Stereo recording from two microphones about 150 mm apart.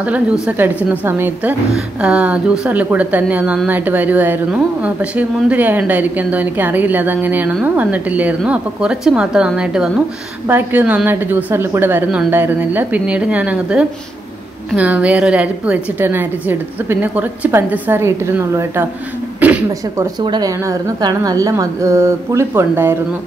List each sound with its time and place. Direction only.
0.0 s a woman's voice: 10° right (ahead or behind)
20.2 s a woman's voice: 30° right (ahead or behind)